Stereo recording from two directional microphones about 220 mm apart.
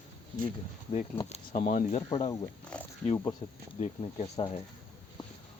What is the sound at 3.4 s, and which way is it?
Speech, 30° left (ahead or behind).